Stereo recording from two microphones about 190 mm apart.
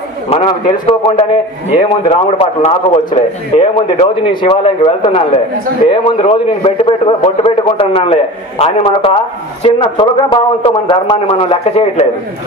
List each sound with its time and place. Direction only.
0.3 s a man's voice: 35° left (ahead or behind)